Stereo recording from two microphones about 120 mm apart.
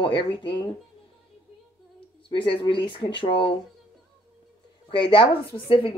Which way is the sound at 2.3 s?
45° left (ahead or behind).